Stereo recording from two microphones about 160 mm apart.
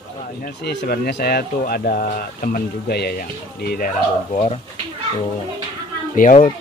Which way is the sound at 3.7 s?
60° left (ahead or behind).